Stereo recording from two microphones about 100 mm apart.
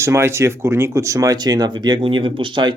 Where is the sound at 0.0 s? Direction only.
25° right (ahead or behind); by 2.0 s 45° right (ahead or behind).